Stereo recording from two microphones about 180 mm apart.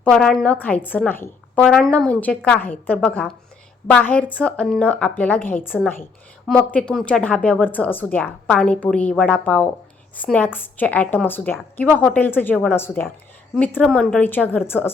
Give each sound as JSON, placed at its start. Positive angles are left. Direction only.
{"t": 0.0, "sound": "speech", "side_deg": 5}